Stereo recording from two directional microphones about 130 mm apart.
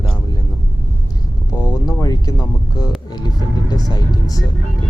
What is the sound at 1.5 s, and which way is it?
Speech, 30° left (ahead or behind).